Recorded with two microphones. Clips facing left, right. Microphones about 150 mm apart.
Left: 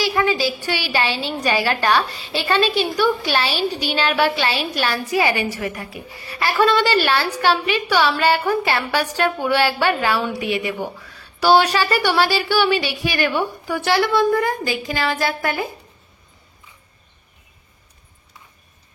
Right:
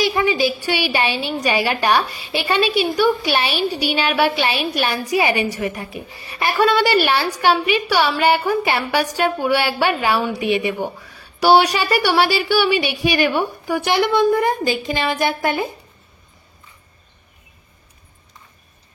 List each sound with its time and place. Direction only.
0.0 s a woman's voice: 20° right (ahead or behind)